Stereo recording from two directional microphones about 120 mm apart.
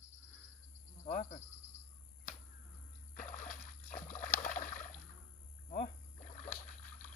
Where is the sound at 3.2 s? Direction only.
90° left.